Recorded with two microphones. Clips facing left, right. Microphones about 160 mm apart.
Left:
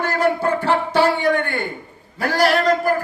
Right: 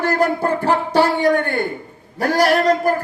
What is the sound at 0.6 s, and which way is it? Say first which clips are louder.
Speech: right 1 dB; 40° right (ahead or behind).